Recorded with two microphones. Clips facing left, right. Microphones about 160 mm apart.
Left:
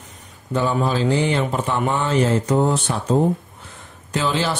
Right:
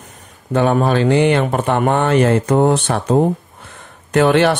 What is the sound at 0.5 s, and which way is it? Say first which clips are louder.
Speech: right 6 dB; 60° right (ahead or behind).